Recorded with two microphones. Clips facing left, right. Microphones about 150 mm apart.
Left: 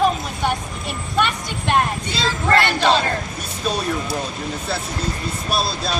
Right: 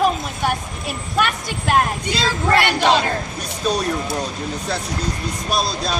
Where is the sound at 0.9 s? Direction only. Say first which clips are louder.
Even; 5° right (ahead or behind).